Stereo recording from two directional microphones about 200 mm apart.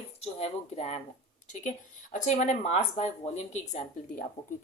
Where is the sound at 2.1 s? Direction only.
35° left (ahead or behind).